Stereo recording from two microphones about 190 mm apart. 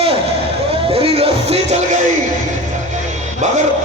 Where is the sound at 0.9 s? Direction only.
30° right (ahead or behind).